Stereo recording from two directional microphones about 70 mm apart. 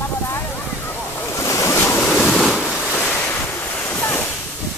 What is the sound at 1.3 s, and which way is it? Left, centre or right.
Waves, left.